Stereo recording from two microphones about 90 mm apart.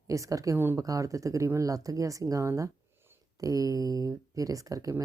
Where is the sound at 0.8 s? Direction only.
40° right (ahead or behind).